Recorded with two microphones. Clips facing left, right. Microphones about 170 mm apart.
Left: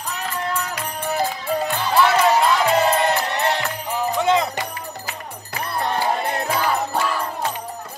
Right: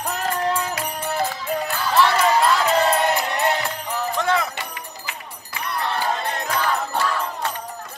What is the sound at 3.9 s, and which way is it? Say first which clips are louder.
Music: left 4 dB; 15° left (ahead or behind).